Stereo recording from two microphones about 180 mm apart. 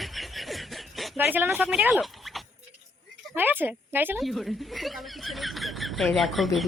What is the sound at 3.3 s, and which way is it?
Speech, 10° right (ahead or behind).